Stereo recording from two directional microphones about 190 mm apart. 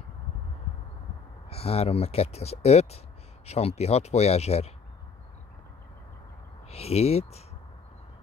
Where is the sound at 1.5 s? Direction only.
30° left (ahead or behind).